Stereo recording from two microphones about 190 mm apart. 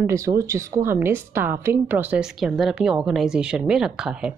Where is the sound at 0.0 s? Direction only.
15° right (ahead or behind).